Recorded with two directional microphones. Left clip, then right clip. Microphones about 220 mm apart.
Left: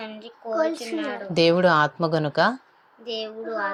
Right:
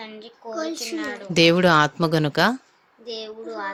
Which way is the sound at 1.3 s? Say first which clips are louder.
Right 2 dB; 30° right (ahead or behind).